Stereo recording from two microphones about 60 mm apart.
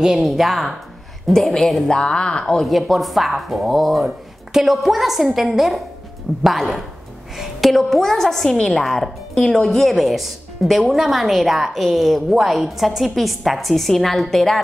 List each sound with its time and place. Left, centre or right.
0.0 s a woman's voice: centre
2.4 s a woman's voice: centre